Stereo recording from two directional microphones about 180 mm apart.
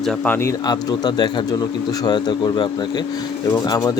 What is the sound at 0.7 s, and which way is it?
Speech, 25° left (ahead or behind).